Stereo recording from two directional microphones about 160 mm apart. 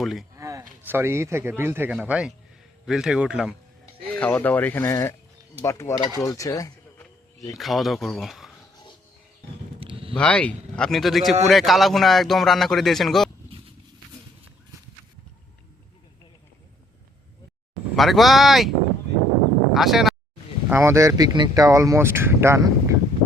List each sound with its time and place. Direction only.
0.0 s a man's voice: centre (ahead or behind)
0.3 s a man's voice: 20° right (ahead or behind)
4.1 s speech: 10° left (ahead or behind)
6.1 s a sound: 20° left (ahead or behind)
7.5 s a man's voice: centre (ahead or behind)
9.8 s a sound: 35° right (ahead or behind)
10.2 s a man's voice: 5° left (ahead or behind)
17.9 s a man's voice: centre (ahead or behind)
19.7 s speech: centre (ahead or behind)
20.7 s speech: 15° right (ahead or behind)